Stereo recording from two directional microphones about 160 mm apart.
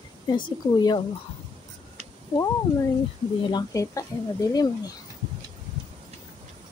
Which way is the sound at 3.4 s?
25° left (ahead or behind).